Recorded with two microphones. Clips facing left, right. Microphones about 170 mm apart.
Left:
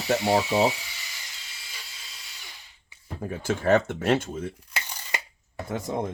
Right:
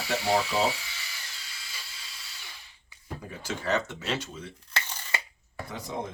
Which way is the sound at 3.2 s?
50° left (ahead or behind).